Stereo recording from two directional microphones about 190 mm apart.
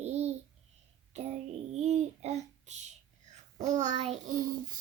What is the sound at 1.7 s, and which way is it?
Child singing, 35° right (ahead or behind).